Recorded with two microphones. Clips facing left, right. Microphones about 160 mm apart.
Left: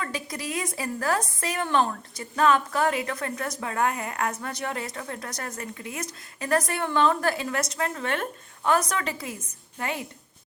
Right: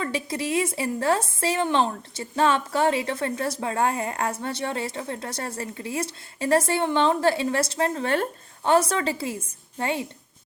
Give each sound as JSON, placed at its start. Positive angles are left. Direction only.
{"t": 0.0, "sound": "a woman's voice", "side_deg": -25}